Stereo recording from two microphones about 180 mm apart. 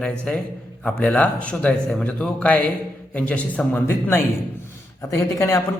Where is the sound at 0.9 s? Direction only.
5° left (ahead or behind).